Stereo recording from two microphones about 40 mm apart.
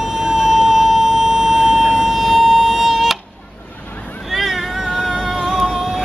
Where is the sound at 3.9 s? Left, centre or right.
Left.